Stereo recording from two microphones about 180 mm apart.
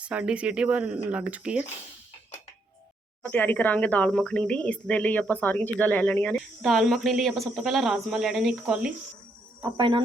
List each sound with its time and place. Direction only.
0.0 s speech: 5° right (ahead or behind)
3.2 s speech: 10° left (ahead or behind)
9.6 s cricket: 25° right (ahead or behind)